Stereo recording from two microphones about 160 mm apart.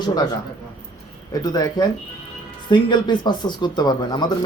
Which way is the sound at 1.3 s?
25° left (ahead or behind).